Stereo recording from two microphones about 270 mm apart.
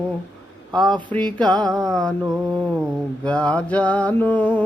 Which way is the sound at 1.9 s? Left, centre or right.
Centre.